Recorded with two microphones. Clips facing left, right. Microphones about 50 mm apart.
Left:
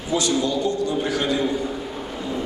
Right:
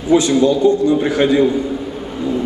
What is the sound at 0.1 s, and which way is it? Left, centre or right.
A man's voice, right.